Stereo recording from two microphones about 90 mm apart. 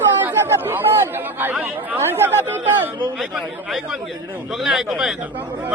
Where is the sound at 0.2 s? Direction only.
20° right (ahead or behind).